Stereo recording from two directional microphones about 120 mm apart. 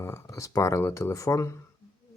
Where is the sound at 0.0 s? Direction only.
25° left (ahead or behind).